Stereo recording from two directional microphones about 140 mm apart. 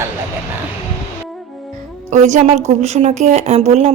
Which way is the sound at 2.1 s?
55° right (ahead or behind).